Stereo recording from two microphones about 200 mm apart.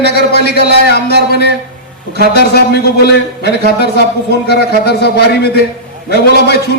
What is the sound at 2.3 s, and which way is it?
A man's voice, 55° left (ahead or behind).